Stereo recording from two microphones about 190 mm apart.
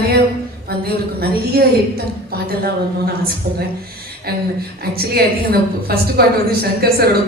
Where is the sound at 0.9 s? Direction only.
55° right (ahead or behind).